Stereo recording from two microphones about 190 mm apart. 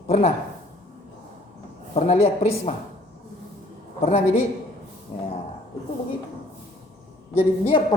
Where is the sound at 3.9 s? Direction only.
35° left (ahead or behind).